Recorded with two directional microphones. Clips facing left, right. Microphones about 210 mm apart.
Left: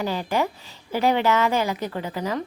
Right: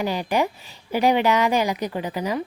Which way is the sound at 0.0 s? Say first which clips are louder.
Right 2 dB; 15° right (ahead or behind).